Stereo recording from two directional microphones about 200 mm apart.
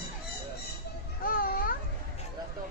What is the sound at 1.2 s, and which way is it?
Music, 45° left (ahead or behind).